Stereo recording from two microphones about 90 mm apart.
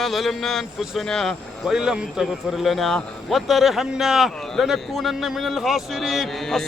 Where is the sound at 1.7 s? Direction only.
10° right (ahead or behind).